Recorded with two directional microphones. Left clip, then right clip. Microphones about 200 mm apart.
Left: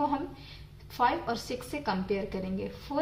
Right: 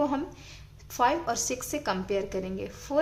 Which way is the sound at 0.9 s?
30° right (ahead or behind).